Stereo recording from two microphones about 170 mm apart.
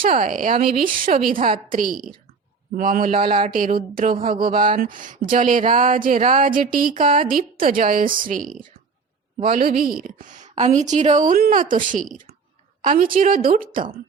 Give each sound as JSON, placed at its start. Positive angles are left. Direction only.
{"t": 0.0, "sound": "speech", "side_deg": -50}
{"t": 11.3, "sound": "speech", "side_deg": -60}